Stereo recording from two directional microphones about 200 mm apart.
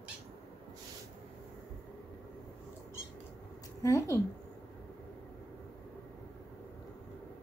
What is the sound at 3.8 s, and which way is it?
Speech, 15° left (ahead or behind).